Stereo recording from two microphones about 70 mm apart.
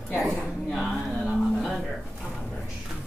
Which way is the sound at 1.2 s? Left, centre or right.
Centre.